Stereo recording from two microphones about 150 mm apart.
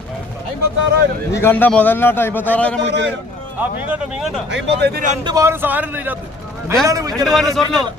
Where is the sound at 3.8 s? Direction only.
5° right (ahead or behind).